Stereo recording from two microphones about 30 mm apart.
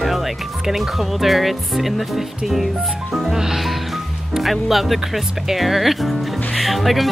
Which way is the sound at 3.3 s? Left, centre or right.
Centre.